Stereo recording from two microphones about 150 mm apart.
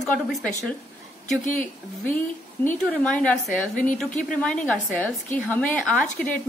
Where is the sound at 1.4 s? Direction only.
60° left (ahead or behind).